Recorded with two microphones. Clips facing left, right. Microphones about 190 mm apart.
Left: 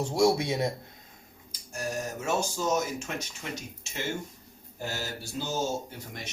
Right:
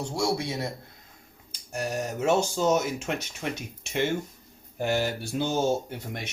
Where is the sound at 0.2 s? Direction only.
20° left (ahead or behind).